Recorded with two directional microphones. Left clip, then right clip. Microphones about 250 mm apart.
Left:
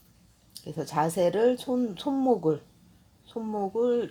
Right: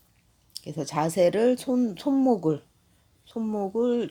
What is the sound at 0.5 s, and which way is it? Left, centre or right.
Speech, centre.